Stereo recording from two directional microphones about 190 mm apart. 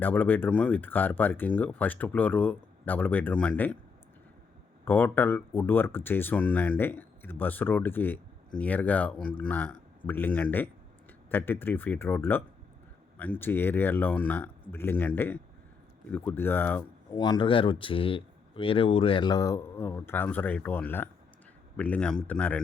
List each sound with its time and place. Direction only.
0.0 s speech: 10° left (ahead or behind)
4.9 s speech: 10° left (ahead or behind)
17.1 s speech: 20° left (ahead or behind); by 22.6 s 5° left (ahead or behind)